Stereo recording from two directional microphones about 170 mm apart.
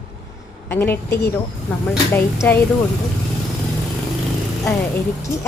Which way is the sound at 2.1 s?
15° left (ahead or behind).